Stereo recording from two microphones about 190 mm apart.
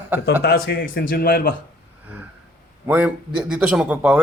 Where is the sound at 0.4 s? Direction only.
55° left (ahead or behind).